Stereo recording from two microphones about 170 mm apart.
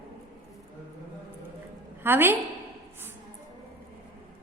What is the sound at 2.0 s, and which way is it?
Speech, 15° right (ahead or behind).